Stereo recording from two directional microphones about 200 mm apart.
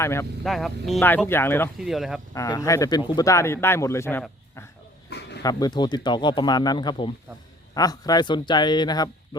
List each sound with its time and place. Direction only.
0.0 s speech: 15° left (ahead or behind)
0.4 s speech: centre (ahead or behind)
1.8 s speech: centre (ahead or behind)
2.3 s speech: 15° left (ahead or behind)
5.0 s a sound: 55° left (ahead or behind)
5.4 s speech: 20° left (ahead or behind)